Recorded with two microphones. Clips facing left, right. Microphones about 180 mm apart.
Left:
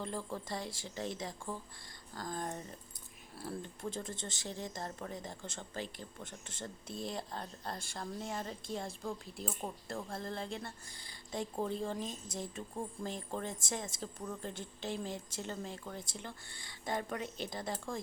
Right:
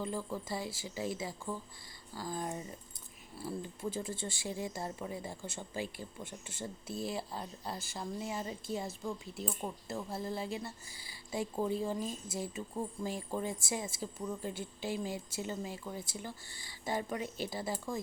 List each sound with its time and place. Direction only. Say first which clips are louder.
0.0 s speech: right 2 dB; centre (ahead or behind)